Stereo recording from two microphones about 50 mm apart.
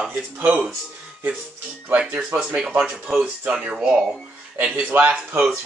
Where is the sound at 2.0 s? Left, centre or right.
Right.